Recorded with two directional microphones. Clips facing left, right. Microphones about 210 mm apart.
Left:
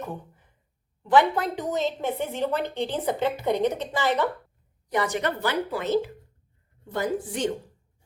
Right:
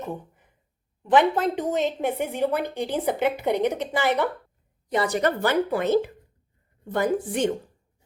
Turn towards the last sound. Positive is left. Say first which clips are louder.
# right 4 dB
turn(degrees=-55)  # may be behind; listen again after turning